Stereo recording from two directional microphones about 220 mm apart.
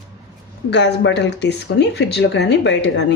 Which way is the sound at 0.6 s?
55° left (ahead or behind).